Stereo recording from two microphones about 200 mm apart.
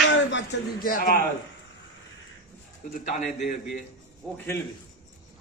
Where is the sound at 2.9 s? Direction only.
40° left (ahead or behind).